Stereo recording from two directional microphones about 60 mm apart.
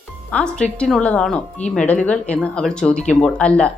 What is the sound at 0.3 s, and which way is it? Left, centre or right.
A woman's voice, centre.